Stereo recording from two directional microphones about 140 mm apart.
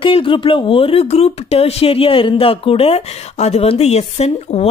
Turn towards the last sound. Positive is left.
turn(degrees=50)  # may be behind; listen again after turning